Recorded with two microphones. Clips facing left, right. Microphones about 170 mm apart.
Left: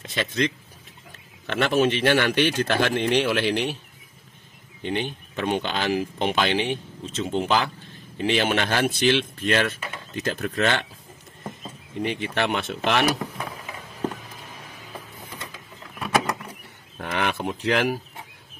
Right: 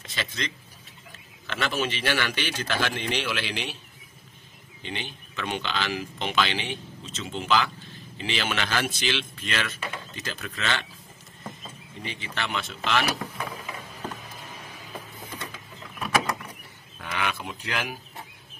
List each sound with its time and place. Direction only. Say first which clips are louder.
0.1 s speech: left 9 dB; 55° left (ahead or behind)
1.5 s a man's voice: left 8 dB; 55° left (ahead or behind)
4.8 s speech: left 9 dB; 50° left (ahead or behind)
12.0 s a man's voice: left 9 dB; 60° left (ahead or behind)
17.0 s a sound: left 5 dB; 55° left (ahead or behind)